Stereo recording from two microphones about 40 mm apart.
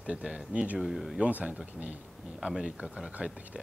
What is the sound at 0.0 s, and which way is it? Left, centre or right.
Speech, right.